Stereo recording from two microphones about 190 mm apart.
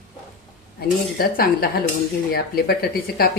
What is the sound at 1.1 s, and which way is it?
Speech, 50° left (ahead or behind).